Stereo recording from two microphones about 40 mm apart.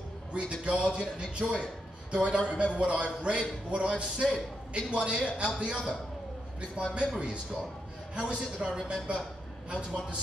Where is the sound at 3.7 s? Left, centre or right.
Right.